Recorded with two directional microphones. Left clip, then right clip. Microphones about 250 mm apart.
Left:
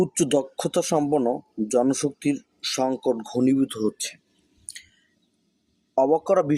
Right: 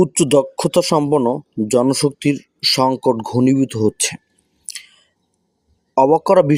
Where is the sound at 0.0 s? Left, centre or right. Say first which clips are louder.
Right 8 dB; right.